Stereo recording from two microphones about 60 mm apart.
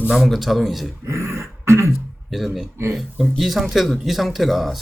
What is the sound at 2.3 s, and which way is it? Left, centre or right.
Speech, centre.